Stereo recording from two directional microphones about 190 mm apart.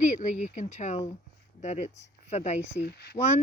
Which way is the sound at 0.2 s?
40° left (ahead or behind).